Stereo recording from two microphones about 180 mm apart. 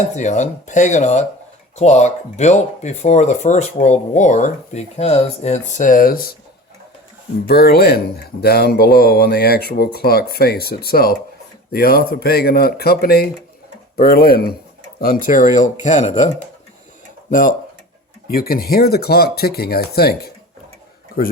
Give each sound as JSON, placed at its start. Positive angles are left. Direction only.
{"t": 0.2, "sound": "speech", "side_deg": 40}
{"t": 7.4, "sound": "speech", "side_deg": 60}
{"t": 18.3, "sound": "speech", "side_deg": 55}